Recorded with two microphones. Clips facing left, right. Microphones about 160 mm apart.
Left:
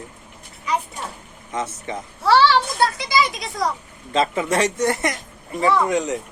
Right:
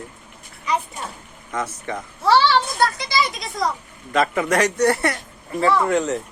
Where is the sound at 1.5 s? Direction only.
25° left (ahead or behind).